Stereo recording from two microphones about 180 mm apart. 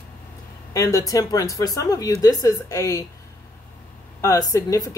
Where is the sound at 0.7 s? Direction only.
20° left (ahead or behind).